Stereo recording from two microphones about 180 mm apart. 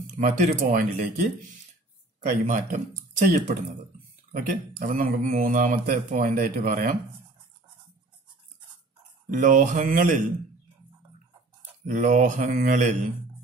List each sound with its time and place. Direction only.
0.2 s speech: 55° right (ahead or behind)
2.4 s speech: 45° right (ahead or behind)
9.3 s speech: 45° right (ahead or behind)
11.8 s speech: 45° right (ahead or behind)